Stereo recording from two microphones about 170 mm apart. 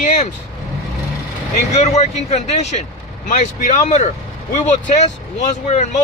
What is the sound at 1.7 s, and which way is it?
Speech, 40° left (ahead or behind).